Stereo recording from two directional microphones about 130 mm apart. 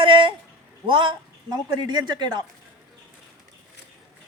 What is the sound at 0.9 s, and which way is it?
Speech, 40° right (ahead or behind).